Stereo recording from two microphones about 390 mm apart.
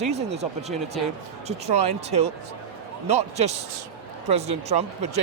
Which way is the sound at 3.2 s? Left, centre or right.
Centre.